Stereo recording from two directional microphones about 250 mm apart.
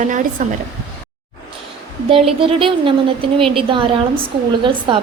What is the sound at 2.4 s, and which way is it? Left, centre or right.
A woman's voice, right.